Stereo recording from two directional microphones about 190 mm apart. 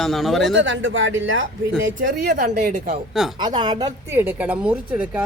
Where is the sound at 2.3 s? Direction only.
40° right (ahead or behind).